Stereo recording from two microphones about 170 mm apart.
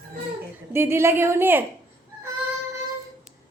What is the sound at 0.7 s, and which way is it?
Speech, 15° right (ahead or behind).